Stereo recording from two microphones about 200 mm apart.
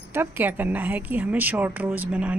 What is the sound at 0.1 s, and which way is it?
A woman's voice, 10° right (ahead or behind).